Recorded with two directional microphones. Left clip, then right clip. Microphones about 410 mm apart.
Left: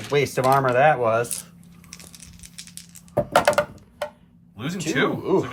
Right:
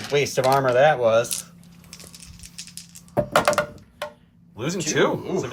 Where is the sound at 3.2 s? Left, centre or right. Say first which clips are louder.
Left 1 dB; centre.